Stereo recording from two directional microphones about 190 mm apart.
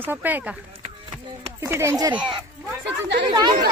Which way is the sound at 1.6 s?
15° right (ahead or behind).